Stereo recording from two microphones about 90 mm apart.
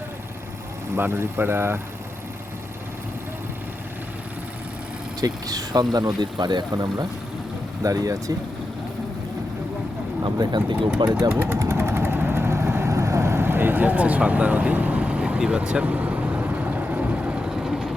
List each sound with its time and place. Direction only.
0.9 s speech: 25° right (ahead or behind)
5.2 s speech: 45° right (ahead or behind)
7.8 s speech: 40° right (ahead or behind)
10.2 s speech: 50° right (ahead or behind)
11.3 s speech: 20° right (ahead or behind)
11.6 s vehicle: 30° right (ahead or behind); by 17.9 s 5° right (ahead or behind)